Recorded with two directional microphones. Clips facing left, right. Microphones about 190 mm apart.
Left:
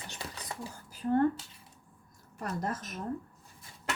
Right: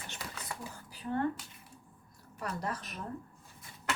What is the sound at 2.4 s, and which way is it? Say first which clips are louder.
Speech: left 2 dB; 45° left (ahead or behind).